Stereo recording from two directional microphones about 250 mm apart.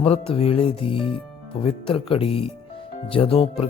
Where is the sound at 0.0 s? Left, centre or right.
Left.